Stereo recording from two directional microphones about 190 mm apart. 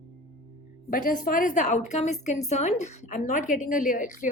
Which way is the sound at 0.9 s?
45° left (ahead or behind).